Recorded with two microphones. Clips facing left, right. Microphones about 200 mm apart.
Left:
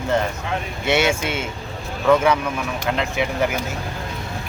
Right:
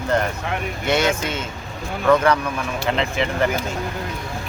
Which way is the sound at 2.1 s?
5° left (ahead or behind).